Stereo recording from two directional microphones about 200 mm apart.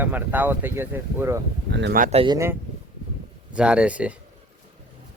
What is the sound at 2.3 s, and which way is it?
Speech, 15° right (ahead or behind).